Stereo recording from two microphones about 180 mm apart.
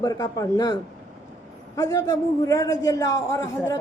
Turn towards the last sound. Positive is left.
turn(degrees=15)  # may be behind; listen again after turning